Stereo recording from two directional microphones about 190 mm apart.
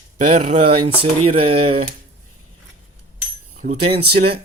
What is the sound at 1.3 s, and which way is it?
Speech, 30° right (ahead or behind).